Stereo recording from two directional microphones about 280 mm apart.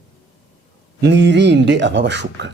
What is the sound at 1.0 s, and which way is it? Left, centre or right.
A man's voice, right.